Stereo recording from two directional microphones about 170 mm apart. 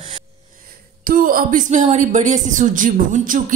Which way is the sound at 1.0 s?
55° right (ahead or behind).